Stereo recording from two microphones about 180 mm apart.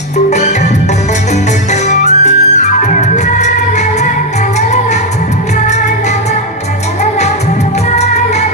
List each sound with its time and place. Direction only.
0.3 s music: 40° left (ahead or behind)
1.7 s music: 40° left (ahead or behind)
7.9 s music: 40° left (ahead or behind)